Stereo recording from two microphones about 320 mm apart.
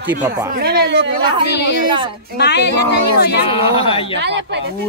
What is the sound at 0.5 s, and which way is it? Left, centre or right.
Speech, right.